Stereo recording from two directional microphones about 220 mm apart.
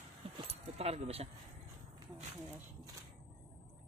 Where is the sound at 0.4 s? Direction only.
25° right (ahead or behind).